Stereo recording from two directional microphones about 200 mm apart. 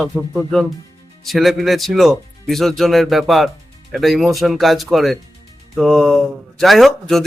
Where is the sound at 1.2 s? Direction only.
Centre (ahead or behind).